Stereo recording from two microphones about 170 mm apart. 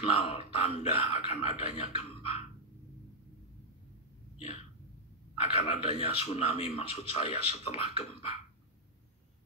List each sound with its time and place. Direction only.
0.0 s speech: 35° left (ahead or behind)
5.6 s speech: 40° left (ahead or behind)